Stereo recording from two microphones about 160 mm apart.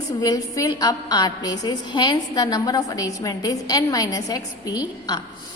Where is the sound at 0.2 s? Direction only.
25° left (ahead or behind).